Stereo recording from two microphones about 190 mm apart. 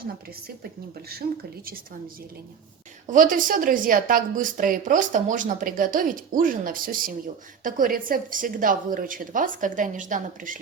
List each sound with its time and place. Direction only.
1.1 s speech: 55° right (ahead or behind)
3.1 s a woman's voice: 45° right (ahead or behind)